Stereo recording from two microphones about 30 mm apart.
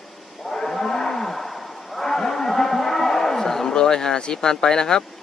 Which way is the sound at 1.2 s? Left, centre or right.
Centre.